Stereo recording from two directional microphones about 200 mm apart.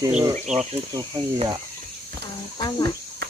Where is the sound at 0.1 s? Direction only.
5° right (ahead or behind).